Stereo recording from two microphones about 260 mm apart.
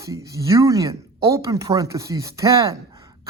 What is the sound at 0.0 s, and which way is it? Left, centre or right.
Speech, centre.